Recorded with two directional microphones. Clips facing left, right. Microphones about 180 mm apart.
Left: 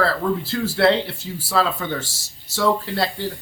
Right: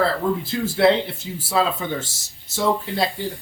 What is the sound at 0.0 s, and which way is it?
A man's voice, 20° right (ahead or behind).